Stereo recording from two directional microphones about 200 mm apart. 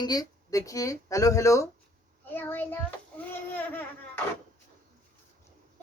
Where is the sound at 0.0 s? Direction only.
20° left (ahead or behind).